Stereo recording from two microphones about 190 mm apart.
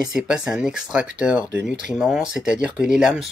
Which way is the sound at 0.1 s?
5° right (ahead or behind).